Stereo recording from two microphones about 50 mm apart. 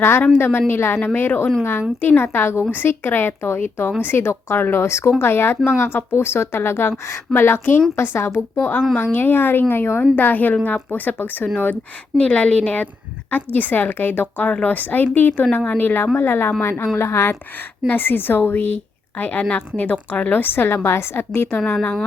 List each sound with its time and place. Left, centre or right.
0.0 s a woman's voice: left
4.8 s a woman's voice: left
5.2 s a woman's voice: left
8.5 s a woman's voice: left
10.2 s a woman's voice: left
12.1 s a woman's voice: left
17.8 s a woman's voice: left
20.3 s a woman's voice: left